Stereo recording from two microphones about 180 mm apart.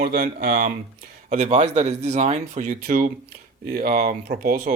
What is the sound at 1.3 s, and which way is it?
Speech, 40° right (ahead or behind).